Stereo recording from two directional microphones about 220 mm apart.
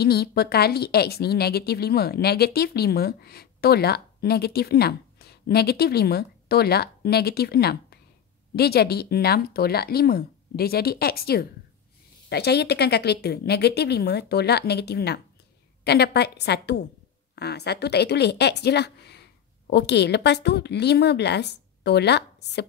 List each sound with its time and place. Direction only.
0.0 s a woman's voice: 45° left (ahead or behind)